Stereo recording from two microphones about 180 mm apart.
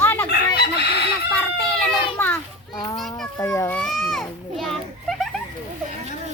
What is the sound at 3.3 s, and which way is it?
Children playing, 15° left (ahead or behind).